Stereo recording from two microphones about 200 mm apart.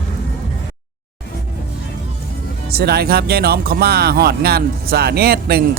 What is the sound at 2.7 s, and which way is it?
Speech, 50° right (ahead or behind).